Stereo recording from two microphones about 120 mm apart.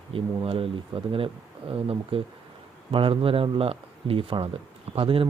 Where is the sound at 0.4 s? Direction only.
50° right (ahead or behind).